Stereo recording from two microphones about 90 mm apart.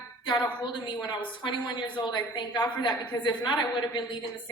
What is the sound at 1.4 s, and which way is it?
A woman's voice, 60° left (ahead or behind).